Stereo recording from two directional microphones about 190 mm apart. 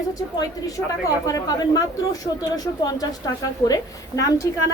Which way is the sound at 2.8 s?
20° left (ahead or behind).